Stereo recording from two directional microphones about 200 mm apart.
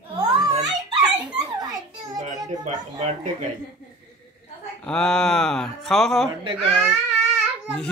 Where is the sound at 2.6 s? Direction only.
35° right (ahead or behind).